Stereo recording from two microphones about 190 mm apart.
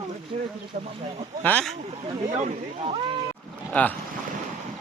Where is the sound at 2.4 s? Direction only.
30° right (ahead or behind).